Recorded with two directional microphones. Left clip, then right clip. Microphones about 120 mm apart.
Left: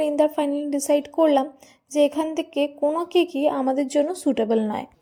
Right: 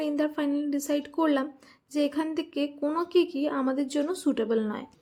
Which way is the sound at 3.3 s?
30° left (ahead or behind).